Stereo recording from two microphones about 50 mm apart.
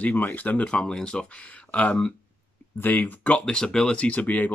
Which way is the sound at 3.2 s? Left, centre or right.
Left.